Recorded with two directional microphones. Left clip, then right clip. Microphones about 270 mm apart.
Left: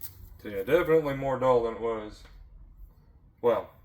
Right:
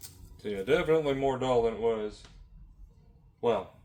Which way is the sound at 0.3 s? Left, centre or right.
Centre.